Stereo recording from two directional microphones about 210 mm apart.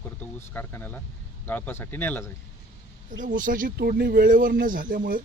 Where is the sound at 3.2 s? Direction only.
40° right (ahead or behind).